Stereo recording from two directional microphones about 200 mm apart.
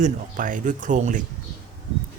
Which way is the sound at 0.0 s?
40° right (ahead or behind).